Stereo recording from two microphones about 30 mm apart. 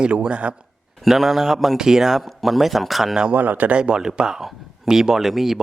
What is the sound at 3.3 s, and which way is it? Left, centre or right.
Speech, right.